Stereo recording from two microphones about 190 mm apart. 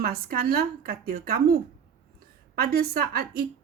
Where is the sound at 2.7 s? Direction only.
55° right (ahead or behind).